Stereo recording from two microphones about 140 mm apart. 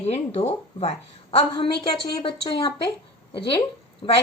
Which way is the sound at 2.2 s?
40° left (ahead or behind).